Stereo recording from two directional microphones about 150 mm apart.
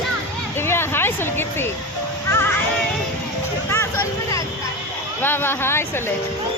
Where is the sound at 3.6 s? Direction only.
15° left (ahead or behind).